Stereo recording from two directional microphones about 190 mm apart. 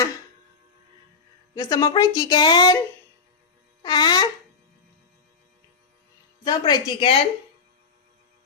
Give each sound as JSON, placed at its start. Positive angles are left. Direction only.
{"t": 1.5, "sound": "a woman's voice", "side_deg": 20}
{"t": 3.8, "sound": "a woman's voice", "side_deg": 25}
{"t": 6.4, "sound": "a woman's voice", "side_deg": 20}